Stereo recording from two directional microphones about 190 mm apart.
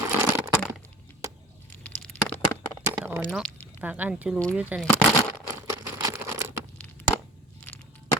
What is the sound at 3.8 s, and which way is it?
Speech, 10° right (ahead or behind).